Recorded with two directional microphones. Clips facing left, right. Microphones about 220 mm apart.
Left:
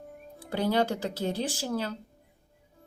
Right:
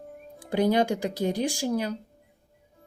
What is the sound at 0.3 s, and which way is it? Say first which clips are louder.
Speech: right 4 dB; 15° right (ahead or behind).